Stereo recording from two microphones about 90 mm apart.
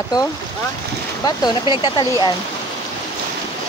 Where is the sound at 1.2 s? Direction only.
55° left (ahead or behind).